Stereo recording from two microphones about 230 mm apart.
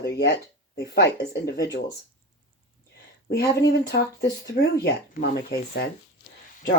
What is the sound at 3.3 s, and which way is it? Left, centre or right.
Speech, left.